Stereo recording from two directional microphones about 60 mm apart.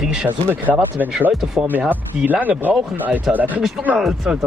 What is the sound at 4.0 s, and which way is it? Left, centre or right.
Speech, centre.